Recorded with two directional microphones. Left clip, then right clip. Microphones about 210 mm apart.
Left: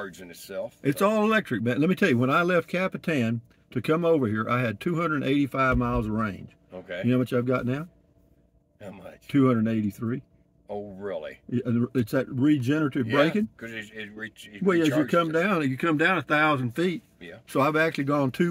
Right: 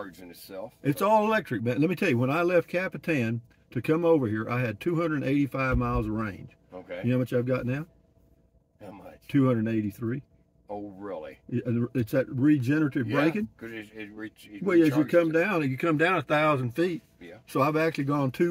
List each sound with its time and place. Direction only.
0.0 s speech: 60° left (ahead or behind)
0.7 s speech: 20° left (ahead or behind)
6.7 s speech: 60° left (ahead or behind)
7.1 s speech: 20° left (ahead or behind)
9.3 s speech: 25° left (ahead or behind)
10.7 s speech: 60° left (ahead or behind)
11.5 s speech: 25° left (ahead or behind)
13.0 s speech: 55° left (ahead or behind)
15.1 s speech: 20° left (ahead or behind)